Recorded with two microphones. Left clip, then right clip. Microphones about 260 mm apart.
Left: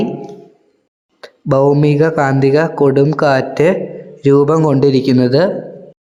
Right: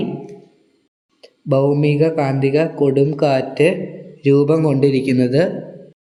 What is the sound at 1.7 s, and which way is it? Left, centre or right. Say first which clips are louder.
A man's voice: left 4 dB; centre.